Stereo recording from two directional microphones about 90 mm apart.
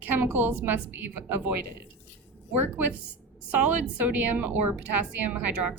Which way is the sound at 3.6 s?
15° right (ahead or behind).